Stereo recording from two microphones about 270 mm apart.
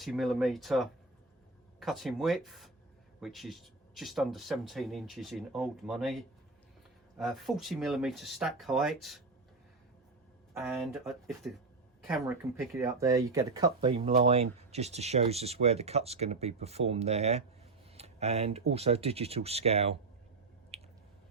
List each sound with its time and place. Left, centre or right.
0.0 s speech: centre
10.5 s speech: centre; by 17.4 s right
17.9 s a sound: right
18.7 s speech: right
20.7 s squish: right